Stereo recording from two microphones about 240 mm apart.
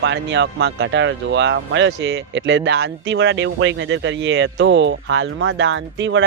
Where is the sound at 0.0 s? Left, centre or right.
Right.